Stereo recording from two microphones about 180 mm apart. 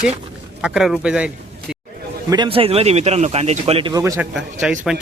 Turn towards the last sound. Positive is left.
turn(degrees=-5)  # may be behind; listen again after turning